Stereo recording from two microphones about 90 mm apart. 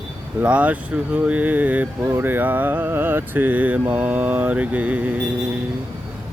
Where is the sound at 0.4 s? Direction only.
15° right (ahead or behind).